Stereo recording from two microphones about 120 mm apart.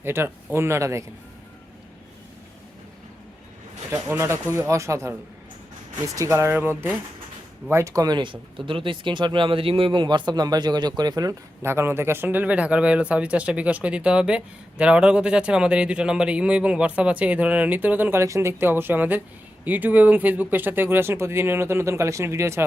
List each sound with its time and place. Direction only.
0.0 s speech: 20° right (ahead or behind)
4.2 s speech: 25° right (ahead or behind)
6.1 s speech: 25° right (ahead or behind)